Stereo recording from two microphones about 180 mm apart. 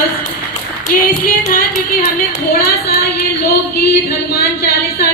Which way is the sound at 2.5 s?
55° left (ahead or behind).